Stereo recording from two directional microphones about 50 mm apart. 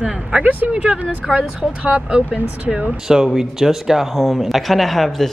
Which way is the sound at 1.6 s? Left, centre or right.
Right.